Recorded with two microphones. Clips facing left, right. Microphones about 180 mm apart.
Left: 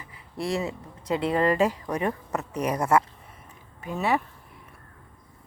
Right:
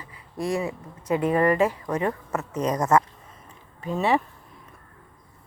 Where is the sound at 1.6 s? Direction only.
15° left (ahead or behind).